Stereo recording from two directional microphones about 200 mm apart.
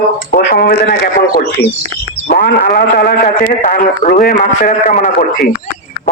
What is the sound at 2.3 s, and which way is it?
A man's voice, 50° left (ahead or behind).